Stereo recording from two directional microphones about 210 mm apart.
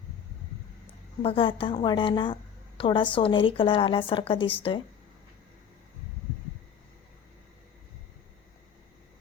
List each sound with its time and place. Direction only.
1.2 s a woman's voice: 25° left (ahead or behind)